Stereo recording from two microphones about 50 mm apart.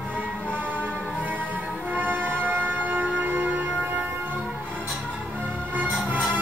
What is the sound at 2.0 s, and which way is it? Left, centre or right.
Music, right.